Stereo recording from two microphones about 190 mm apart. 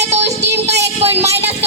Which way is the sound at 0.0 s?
35° right (ahead or behind).